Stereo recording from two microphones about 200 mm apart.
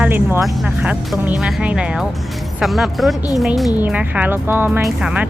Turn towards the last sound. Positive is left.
turn(degrees=-5)  # may be behind; listen again after turning